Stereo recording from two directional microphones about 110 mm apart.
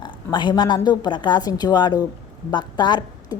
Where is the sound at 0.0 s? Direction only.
40° left (ahead or behind).